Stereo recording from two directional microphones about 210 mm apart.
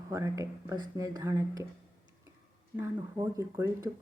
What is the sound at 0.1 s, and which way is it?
A woman's voice, 15° right (ahead or behind).